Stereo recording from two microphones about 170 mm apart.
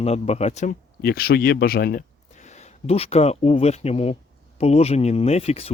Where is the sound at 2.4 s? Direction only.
40° left (ahead or behind).